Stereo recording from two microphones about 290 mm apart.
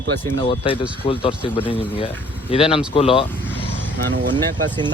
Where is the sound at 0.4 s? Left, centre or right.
Centre.